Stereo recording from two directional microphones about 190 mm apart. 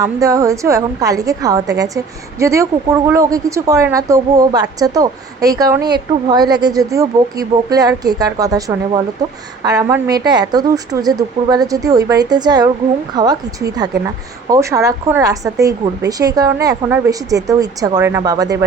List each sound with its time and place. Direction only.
0.0 s a woman's voice: 15° right (ahead or behind)